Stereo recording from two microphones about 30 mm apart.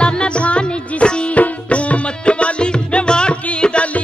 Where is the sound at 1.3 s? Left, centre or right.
Left.